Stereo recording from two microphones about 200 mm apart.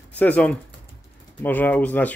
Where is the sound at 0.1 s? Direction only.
10° left (ahead or behind).